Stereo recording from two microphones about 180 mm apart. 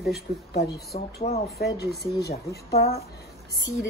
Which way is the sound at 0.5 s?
60° left (ahead or behind).